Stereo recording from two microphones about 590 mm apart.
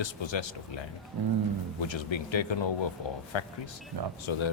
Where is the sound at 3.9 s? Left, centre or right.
Right.